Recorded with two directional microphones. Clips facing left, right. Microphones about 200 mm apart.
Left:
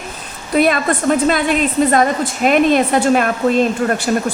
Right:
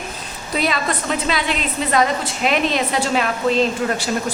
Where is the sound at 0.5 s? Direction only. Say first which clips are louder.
Left 7 dB; 50° left (ahead or behind).